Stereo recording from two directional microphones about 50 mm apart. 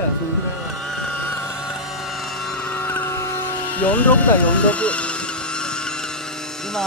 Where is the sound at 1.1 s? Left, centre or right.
Left.